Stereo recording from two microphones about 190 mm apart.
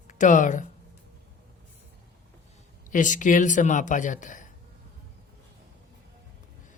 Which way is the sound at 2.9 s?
40° left (ahead or behind).